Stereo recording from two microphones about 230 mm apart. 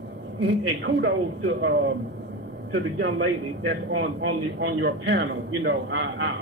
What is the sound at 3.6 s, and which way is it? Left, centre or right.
A man's voice, right.